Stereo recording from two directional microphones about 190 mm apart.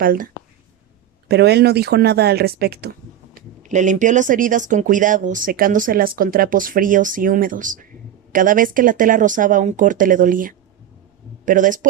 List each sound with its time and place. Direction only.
0.0 s speech: 50° right (ahead or behind)
1.3 s speech: 60° right (ahead or behind)
3.3 s speech: 40° right (ahead or behind)